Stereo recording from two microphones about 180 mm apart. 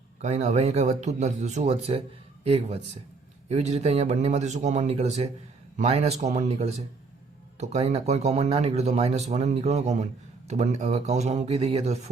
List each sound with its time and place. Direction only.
0.2 s speech: 40° right (ahead or behind)